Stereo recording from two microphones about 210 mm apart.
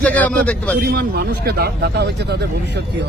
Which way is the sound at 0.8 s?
50° right (ahead or behind).